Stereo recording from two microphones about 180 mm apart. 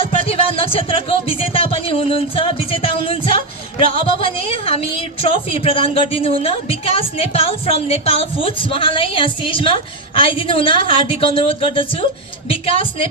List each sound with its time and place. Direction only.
0.0 s speech: 30° left (ahead or behind)